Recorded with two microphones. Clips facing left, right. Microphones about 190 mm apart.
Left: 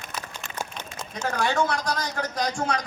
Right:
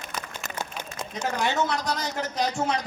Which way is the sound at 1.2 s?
15° right (ahead or behind).